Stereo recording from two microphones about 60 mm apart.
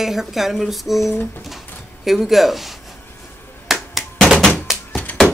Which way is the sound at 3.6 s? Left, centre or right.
Centre.